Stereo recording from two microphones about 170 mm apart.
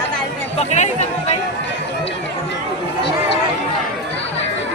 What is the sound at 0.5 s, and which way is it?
Speech, 40° left (ahead or behind).